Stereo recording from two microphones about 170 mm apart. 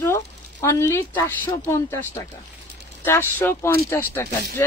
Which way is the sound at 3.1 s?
10° left (ahead or behind).